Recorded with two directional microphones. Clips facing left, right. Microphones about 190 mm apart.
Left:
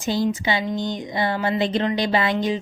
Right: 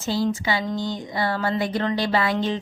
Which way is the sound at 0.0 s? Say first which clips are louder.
Left 1 dB; 20° left (ahead or behind).